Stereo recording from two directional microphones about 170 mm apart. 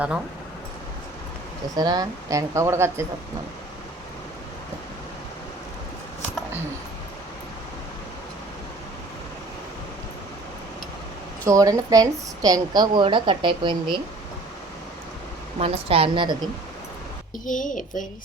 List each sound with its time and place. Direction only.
1.7 s a woman's voice: 20° right (ahead or behind)
11.4 s a woman's voice: 20° right (ahead or behind)
15.5 s a woman's voice: 35° right (ahead or behind)
17.4 s a woman's voice: 50° left (ahead or behind)